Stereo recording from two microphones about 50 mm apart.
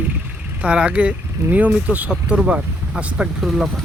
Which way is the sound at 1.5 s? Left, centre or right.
Right.